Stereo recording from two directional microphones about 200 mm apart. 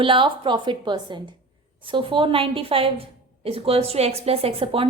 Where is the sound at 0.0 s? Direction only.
25° right (ahead or behind).